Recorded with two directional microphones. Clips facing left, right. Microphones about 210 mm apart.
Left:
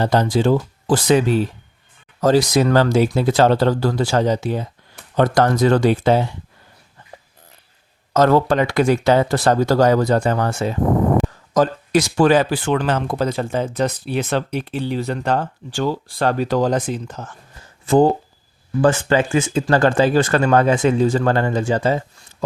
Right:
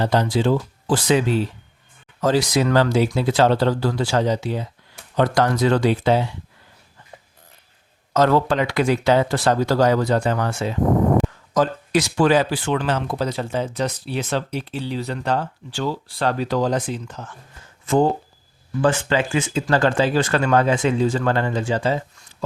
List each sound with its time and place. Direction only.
0.0 s speech: 45° left (ahead or behind)
8.1 s speech: 45° left (ahead or behind)